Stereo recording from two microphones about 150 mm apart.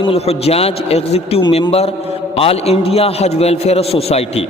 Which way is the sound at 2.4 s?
40° left (ahead or behind).